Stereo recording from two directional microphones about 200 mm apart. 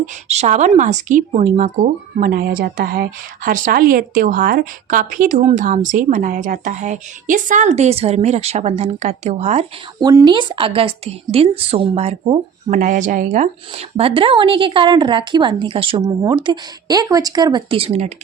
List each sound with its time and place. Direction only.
0.0 s a woman's voice: 35° right (ahead or behind)
10.0 s a woman's voice: 20° right (ahead or behind)